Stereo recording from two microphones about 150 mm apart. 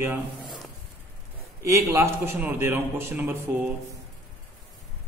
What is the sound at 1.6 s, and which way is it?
A man's voice, 20° right (ahead or behind).